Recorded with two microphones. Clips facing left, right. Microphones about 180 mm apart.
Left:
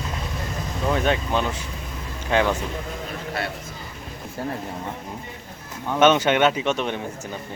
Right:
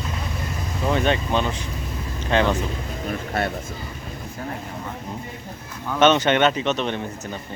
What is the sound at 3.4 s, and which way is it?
Speech, 50° right (ahead or behind).